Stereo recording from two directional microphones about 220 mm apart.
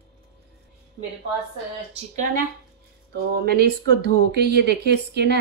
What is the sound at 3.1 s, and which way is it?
Speech, 45° right (ahead or behind).